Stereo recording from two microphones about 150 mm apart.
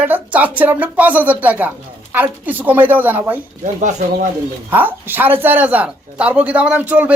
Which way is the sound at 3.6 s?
55° right (ahead or behind).